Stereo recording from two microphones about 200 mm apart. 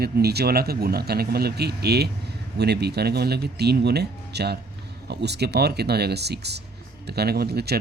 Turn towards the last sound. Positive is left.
turn(degrees=-55)  # may be behind; listen again after turning